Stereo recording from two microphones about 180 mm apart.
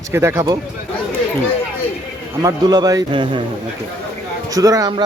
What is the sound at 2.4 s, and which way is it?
Speech, 20° right (ahead or behind).